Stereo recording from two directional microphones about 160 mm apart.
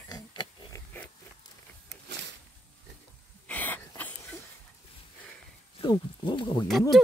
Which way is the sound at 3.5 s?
10° left (ahead or behind).